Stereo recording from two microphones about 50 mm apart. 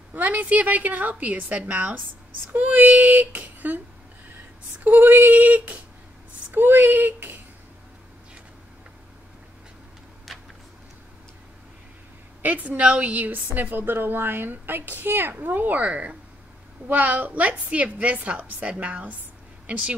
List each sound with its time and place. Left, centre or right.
0.1 s a woman's voice: right
1.5 s a woman's voice: right
2.5 s a woman's voice: right
12.4 s a woman's voice: right
15.8 s a woman's voice: right